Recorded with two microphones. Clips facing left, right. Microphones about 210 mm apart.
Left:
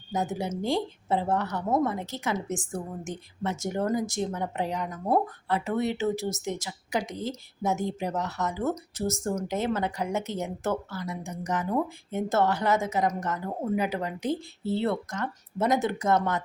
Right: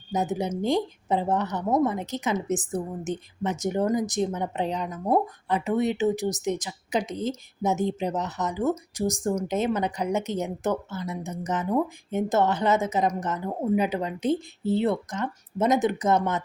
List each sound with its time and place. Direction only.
0.1 s a woman's voice: 20° right (ahead or behind)